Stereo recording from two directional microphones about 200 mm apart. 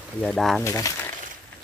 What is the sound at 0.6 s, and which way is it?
Speech, 15° left (ahead or behind).